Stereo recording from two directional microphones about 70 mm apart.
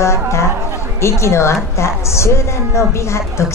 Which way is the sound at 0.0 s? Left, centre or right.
Left.